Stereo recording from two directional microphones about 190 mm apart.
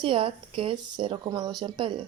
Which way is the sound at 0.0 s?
25° right (ahead or behind).